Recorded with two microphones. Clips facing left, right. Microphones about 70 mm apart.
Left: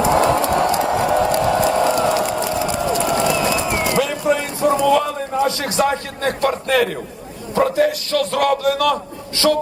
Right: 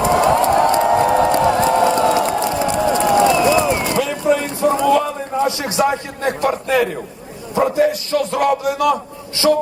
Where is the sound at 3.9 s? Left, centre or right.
Centre.